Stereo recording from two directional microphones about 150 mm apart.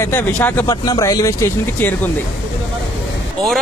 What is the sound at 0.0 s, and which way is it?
Speech, 15° left (ahead or behind).